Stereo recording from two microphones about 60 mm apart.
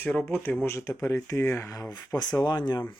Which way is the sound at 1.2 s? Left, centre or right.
Left.